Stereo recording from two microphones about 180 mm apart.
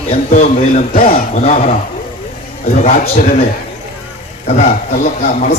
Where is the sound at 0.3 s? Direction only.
40° left (ahead or behind).